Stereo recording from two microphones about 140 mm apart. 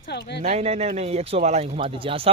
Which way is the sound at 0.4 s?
50° right (ahead or behind).